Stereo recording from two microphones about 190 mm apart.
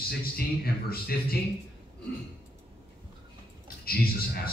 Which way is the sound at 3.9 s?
55° left (ahead or behind).